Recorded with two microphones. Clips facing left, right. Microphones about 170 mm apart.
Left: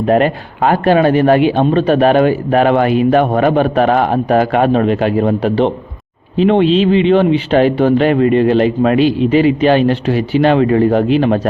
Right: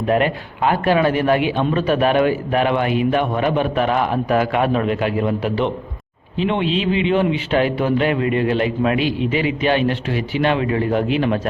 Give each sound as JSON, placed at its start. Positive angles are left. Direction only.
{"t": 0.0, "sound": "a man's voice", "side_deg": 40}